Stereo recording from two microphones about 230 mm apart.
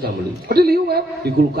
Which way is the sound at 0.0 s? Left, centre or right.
Right.